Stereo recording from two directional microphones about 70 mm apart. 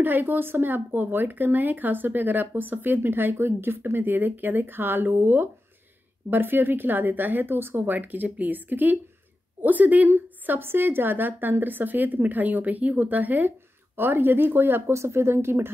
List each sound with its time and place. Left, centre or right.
0.0 s speech: right